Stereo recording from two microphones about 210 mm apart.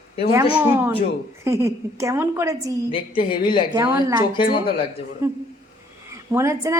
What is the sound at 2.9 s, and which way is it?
Speech, 25° left (ahead or behind).